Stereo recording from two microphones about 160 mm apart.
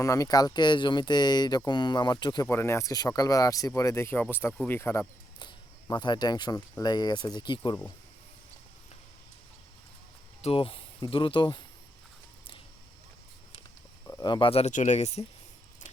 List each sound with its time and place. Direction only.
0.0 s speech: 20° left (ahead or behind)
2.5 s speech: 15° left (ahead or behind)
5.4 s speech: 25° left (ahead or behind)
10.4 s speech: 35° left (ahead or behind)
14.1 s speech: 25° left (ahead or behind)
14.7 s speech: 50° left (ahead or behind)